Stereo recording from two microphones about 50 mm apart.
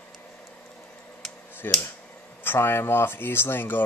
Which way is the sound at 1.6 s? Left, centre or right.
Left.